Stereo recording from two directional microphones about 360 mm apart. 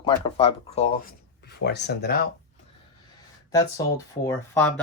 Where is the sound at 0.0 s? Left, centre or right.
Centre.